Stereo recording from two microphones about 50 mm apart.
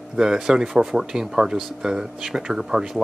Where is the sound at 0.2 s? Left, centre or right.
Centre.